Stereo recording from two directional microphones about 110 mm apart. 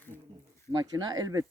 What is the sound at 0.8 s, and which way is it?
Speech, 40° right (ahead or behind).